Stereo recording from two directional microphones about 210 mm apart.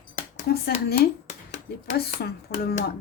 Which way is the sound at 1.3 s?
35° left (ahead or behind).